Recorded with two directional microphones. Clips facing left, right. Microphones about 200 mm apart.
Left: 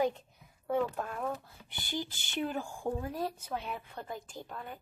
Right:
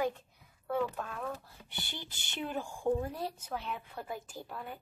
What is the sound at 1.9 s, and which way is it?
Speech, 45° left (ahead or behind).